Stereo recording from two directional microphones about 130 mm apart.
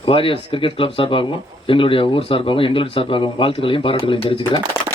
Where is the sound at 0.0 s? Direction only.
40° left (ahead or behind).